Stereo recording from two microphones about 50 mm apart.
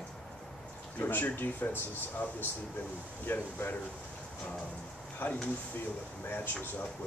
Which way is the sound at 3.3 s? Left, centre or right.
Left.